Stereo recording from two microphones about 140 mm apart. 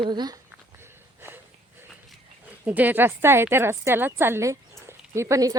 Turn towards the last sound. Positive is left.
turn(degrees=-20)  # may be behind; listen again after turning